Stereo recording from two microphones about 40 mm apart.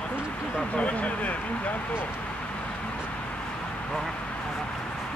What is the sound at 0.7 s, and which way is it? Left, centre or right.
Speech, left.